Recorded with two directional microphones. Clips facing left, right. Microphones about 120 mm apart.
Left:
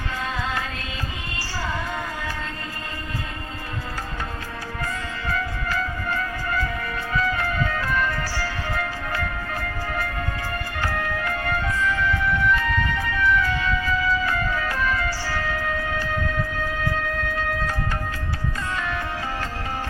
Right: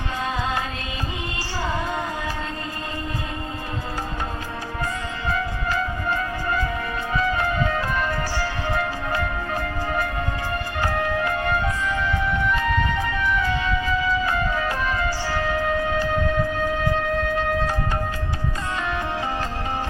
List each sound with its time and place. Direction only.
5.3 s music: 20° right (ahead or behind)
18.8 s music: 20° right (ahead or behind)